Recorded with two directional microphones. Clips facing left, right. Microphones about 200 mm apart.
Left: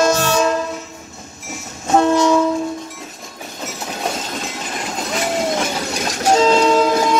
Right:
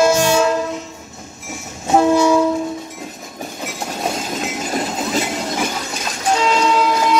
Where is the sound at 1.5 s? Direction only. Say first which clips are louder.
Even; 10° right (ahead or behind).